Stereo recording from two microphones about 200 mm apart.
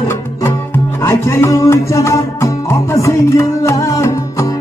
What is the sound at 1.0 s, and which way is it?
Music, 15° left (ahead or behind).